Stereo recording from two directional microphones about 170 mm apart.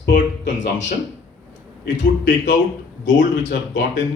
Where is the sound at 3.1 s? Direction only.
90° left.